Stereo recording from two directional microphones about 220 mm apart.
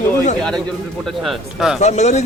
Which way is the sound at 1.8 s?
30° left (ahead or behind).